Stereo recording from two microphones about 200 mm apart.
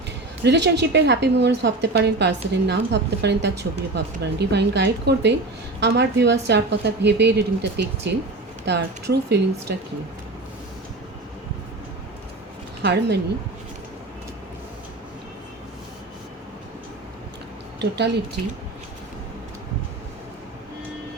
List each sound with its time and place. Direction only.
0.4 s a woman's voice: 60° right (ahead or behind)
12.8 s a woman's voice: 60° right (ahead or behind)
17.7 s a woman's voice: 55° right (ahead or behind)